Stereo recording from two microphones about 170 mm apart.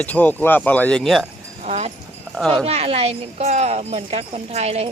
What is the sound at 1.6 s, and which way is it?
Speech, 40° right (ahead or behind).